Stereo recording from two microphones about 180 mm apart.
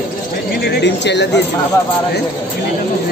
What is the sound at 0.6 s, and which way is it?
Speech, 70° left (ahead or behind).